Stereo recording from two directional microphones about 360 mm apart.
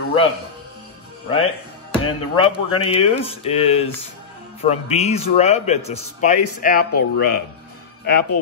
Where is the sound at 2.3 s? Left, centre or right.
Centre.